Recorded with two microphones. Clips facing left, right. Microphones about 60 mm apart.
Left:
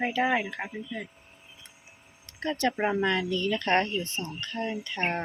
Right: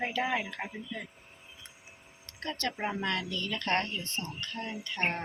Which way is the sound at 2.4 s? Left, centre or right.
Centre.